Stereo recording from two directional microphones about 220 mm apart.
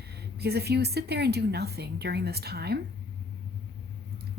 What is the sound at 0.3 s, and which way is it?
Speech, 45° right (ahead or behind).